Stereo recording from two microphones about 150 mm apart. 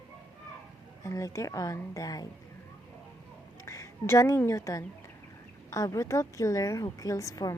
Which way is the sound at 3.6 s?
20° left (ahead or behind).